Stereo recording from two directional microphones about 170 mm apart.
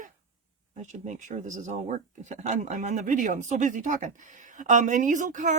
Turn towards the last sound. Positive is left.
turn(degrees=-50)  # may be behind; listen again after turning